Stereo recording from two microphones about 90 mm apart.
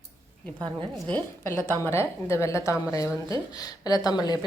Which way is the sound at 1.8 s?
30° left (ahead or behind).